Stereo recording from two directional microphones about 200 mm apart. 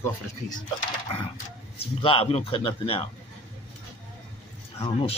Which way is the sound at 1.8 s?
25° left (ahead or behind).